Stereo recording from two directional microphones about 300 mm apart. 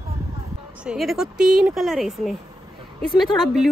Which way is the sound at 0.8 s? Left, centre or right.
Centre.